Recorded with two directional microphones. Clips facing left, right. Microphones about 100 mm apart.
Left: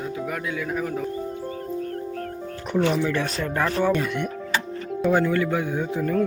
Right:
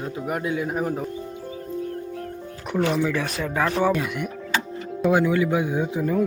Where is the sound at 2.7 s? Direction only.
Centre (ahead or behind).